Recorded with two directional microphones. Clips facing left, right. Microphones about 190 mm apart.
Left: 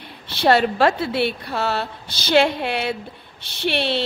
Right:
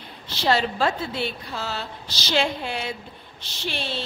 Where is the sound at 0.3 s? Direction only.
60° left (ahead or behind).